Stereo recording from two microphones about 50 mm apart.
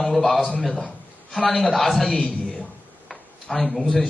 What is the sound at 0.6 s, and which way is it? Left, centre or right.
Speech, centre.